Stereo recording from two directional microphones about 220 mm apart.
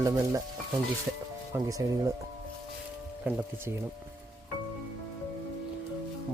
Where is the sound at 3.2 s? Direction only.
10° right (ahead or behind).